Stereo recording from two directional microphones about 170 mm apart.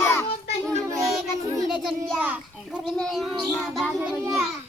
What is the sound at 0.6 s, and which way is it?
Child singing, 20° right (ahead or behind).